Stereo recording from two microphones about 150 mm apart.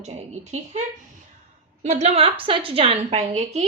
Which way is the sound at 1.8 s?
45° right (ahead or behind).